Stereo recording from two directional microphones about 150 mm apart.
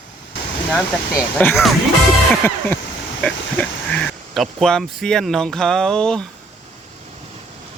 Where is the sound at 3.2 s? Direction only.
10° left (ahead or behind).